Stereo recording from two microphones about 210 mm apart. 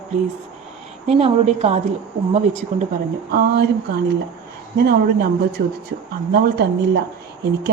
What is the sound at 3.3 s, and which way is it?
Speech, 45° right (ahead or behind).